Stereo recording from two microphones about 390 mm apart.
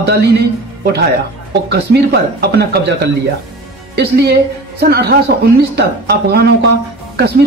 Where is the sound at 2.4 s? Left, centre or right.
Right.